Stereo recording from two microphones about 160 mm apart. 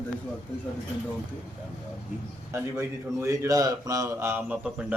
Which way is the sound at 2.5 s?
15° right (ahead or behind).